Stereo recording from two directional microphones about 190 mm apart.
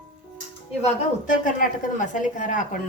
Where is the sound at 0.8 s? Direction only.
45° left (ahead or behind).